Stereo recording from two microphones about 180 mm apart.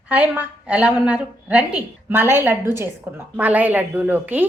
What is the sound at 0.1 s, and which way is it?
A woman's voice, 10° right (ahead or behind).